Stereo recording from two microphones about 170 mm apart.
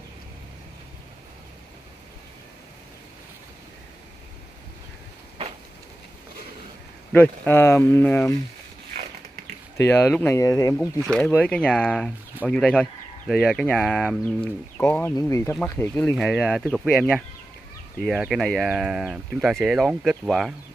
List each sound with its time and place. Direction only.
7.1 s speech: 10° left (ahead or behind)
9.8 s speech: 15° left (ahead or behind)
11.0 s speech: centre (ahead or behind)